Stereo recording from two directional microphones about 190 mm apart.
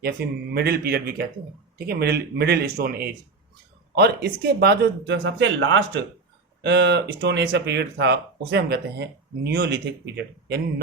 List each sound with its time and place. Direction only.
0.2 s speech: 60° right (ahead or behind); by 6.0 s 75° right (ahead or behind)
6.6 s speech: 60° right (ahead or behind)